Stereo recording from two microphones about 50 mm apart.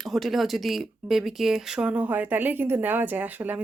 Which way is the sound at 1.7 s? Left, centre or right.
Right.